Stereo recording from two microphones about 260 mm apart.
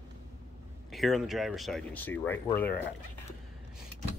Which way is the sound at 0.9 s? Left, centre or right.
Centre.